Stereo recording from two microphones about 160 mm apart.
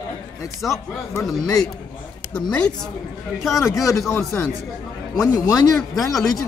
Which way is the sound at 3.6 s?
20° left (ahead or behind).